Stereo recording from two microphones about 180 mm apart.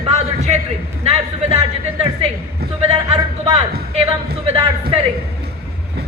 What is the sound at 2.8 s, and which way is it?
Speech, 35° right (ahead or behind).